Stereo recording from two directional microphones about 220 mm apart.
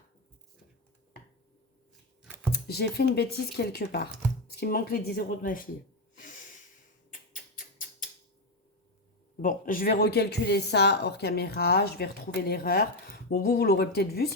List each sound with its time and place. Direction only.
2.2 s computer keyboard: 5° right (ahead or behind)
2.5 s speech: 45° left (ahead or behind)
6.1 s snort: 35° left (ahead or behind)
7.1 s a sound: 40° left (ahead or behind)
9.4 s speech: 40° left (ahead or behind)